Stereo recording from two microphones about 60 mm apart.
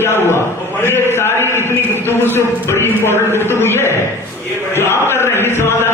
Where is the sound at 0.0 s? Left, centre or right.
Left.